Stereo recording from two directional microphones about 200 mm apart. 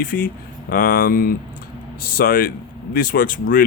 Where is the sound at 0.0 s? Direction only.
45° left (ahead or behind).